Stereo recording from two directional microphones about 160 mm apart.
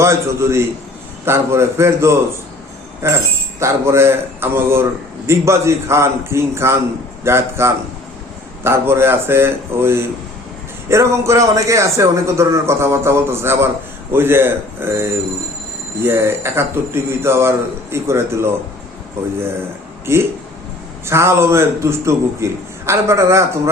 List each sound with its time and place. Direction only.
0.0 s a man's voice: 15° right (ahead or behind)
20.1 s a man's voice: 15° right (ahead or behind)